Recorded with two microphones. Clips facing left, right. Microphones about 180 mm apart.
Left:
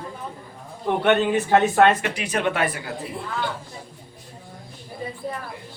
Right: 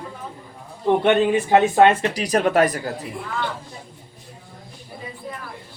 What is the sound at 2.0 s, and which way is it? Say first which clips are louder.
Speech: right 4 dB; 35° right (ahead or behind).